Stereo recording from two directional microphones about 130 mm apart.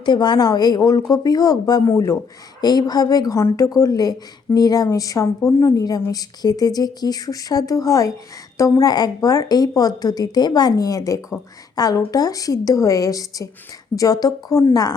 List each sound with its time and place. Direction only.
0.0 s a woman's voice: 35° left (ahead or behind)
2.6 s a woman's voice: 30° left (ahead or behind)